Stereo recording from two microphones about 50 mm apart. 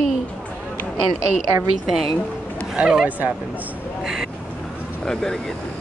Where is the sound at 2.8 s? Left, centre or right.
Right.